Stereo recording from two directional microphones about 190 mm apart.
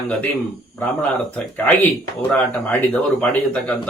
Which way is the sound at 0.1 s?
5° left (ahead or behind).